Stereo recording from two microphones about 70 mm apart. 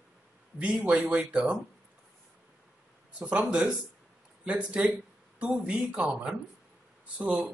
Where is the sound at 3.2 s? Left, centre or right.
Centre.